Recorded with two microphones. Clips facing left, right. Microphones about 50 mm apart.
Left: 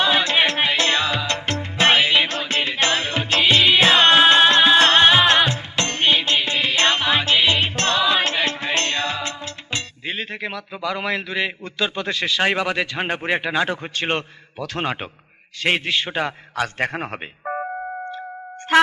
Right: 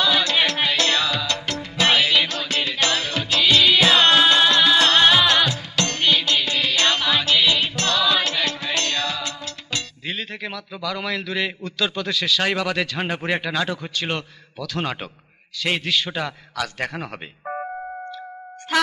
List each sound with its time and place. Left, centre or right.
0.0 s music: left
15.6 s a man's voice: left
18.7 s a man's voice: left